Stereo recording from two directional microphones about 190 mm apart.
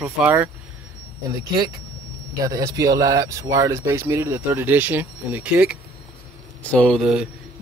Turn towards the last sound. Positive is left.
turn(degrees=-5)  # may be behind; listen again after turning